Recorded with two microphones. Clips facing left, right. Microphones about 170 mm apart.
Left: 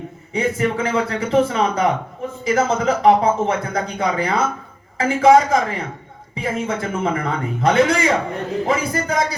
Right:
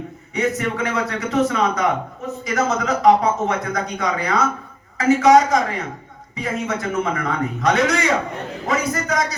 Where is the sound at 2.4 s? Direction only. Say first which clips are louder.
Left 3 dB; 30° left (ahead or behind).